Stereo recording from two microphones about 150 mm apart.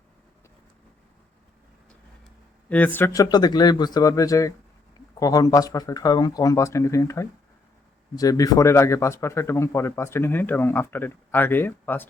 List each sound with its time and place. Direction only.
2.6 s a man's voice: 10° left (ahead or behind)